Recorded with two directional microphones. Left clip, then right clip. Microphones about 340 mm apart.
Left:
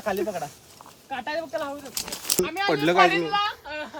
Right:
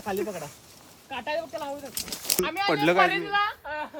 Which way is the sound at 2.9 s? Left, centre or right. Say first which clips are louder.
Left 3 dB; centre.